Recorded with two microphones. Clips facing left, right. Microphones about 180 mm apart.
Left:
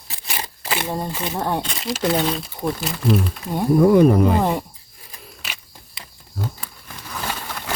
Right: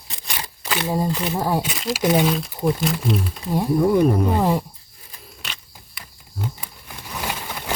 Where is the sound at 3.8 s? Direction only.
90° left.